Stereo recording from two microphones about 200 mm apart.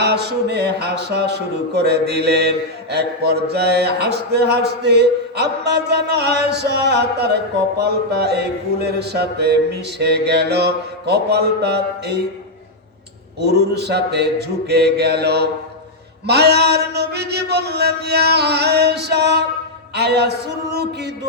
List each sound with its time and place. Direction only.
0.0 s mantra: 55° right (ahead or behind)
13.4 s mantra: 55° right (ahead or behind)